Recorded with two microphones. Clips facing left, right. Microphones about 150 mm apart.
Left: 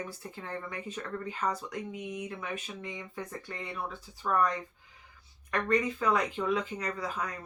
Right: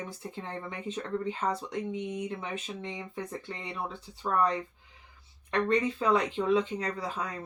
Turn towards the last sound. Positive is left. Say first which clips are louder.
# right 1 dB
turn(degrees=-25)  # may be behind; listen again after turning